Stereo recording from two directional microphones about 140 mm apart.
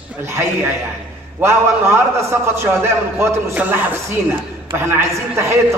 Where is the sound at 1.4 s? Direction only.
20° right (ahead or behind).